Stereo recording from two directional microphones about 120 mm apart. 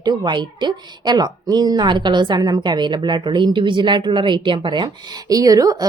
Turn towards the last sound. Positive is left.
turn(degrees=-30)  # may be behind; listen again after turning